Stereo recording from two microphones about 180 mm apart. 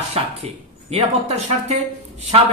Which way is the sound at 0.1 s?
35° right (ahead or behind).